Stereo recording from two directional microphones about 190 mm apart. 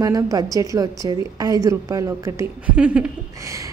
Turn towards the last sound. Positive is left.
turn(degrees=-15)  # may be behind; listen again after turning